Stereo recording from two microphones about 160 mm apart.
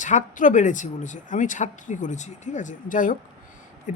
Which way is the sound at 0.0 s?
50° left (ahead or behind).